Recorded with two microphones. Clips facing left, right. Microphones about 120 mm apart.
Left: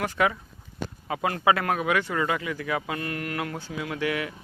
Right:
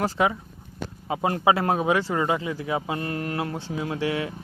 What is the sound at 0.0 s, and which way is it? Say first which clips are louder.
A man's voice: right 2 dB; 25° right (ahead or behind).